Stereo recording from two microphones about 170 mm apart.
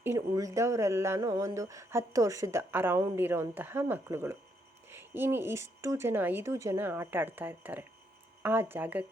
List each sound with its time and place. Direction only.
0.0 s speech: 15° right (ahead or behind)